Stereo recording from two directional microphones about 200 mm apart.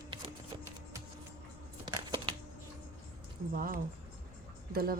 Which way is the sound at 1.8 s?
20° right (ahead or behind).